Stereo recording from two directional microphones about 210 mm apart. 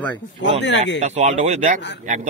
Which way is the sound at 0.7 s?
60° left (ahead or behind).